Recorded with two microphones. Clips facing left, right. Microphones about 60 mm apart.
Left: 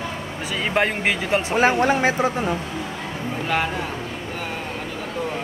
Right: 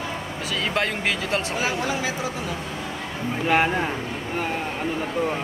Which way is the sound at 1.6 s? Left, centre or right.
Left.